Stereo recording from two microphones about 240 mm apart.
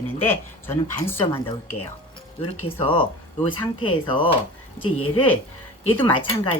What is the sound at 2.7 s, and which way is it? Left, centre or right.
Speech, left.